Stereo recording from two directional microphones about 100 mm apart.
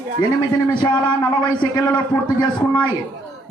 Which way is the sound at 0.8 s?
45° left (ahead or behind).